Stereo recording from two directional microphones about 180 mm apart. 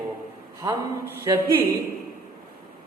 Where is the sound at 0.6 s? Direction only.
15° right (ahead or behind).